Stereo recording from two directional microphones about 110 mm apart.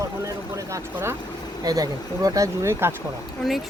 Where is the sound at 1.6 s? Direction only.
35° right (ahead or behind).